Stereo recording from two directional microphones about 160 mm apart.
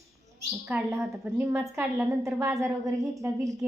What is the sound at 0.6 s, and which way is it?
A woman's voice, 15° right (ahead or behind).